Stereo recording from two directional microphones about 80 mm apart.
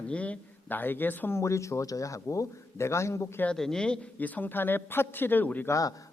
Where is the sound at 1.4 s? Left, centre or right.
Left.